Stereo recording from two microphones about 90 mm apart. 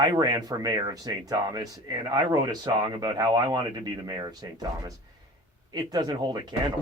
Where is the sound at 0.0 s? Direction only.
50° right (ahead or behind).